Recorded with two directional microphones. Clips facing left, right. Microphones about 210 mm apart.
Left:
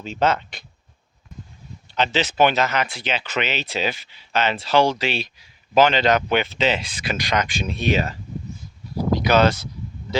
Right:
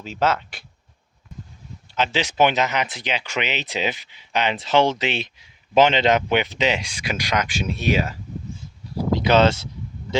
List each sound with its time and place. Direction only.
0.0 s speech: 5° right (ahead or behind)
2.0 s speech: 10° right (ahead or behind)
9.2 s speech: 25° right (ahead or behind)